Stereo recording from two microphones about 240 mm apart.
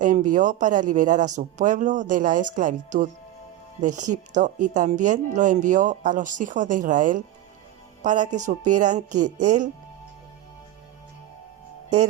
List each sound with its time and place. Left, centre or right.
0.0 s speech: right